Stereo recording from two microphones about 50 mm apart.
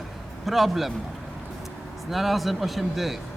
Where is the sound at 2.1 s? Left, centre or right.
Centre.